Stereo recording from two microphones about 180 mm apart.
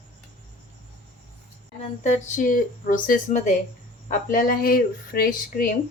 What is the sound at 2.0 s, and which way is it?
Speech, 40° left (ahead or behind).